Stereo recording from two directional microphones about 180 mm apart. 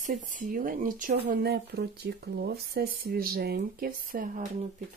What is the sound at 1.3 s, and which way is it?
Speech, 65° right (ahead or behind).